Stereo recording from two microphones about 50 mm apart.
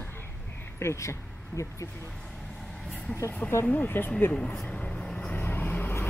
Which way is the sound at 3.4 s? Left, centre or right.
Left.